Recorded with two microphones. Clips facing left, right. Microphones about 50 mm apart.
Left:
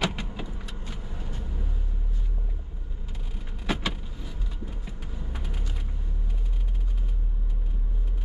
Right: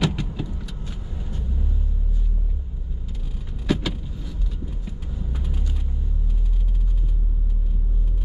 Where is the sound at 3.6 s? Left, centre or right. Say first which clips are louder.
Right 5 dB; centre.